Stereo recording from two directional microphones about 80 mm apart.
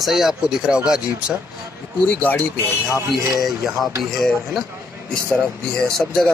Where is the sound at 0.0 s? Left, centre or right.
Centre.